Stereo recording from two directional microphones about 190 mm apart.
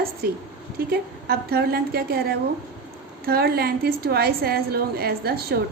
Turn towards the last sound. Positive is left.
turn(degrees=-55)  # may be behind; listen again after turning